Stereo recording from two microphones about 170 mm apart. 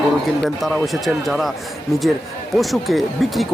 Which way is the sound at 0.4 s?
Centre (ahead or behind).